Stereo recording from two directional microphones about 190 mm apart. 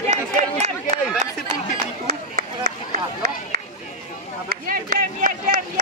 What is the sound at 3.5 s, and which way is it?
Run, 60° right (ahead or behind).